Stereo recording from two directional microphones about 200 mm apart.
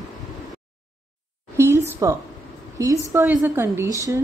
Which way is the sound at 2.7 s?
15° right (ahead or behind).